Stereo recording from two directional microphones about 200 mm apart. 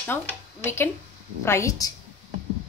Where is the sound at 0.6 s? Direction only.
10° left (ahead or behind).